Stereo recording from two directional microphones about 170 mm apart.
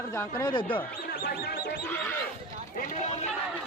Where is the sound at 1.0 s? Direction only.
60° left (ahead or behind).